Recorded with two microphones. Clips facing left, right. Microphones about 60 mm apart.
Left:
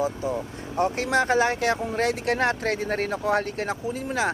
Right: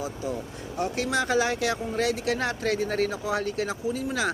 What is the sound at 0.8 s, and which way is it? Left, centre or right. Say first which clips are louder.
Speech: left 4 dB; left.